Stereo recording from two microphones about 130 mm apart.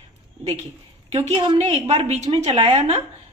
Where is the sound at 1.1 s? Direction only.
55° right (ahead or behind).